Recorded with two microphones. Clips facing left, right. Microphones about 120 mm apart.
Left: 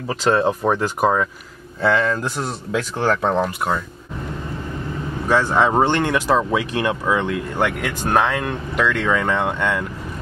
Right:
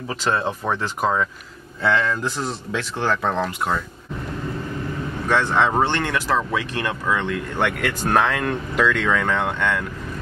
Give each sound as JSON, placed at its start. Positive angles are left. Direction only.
{"t": 0.2, "sound": "speech", "side_deg": 35}
{"t": 0.7, "sound": "speech", "side_deg": 10}
{"t": 5.3, "sound": "speech", "side_deg": 10}
{"t": 8.7, "sound": "speech", "side_deg": 0}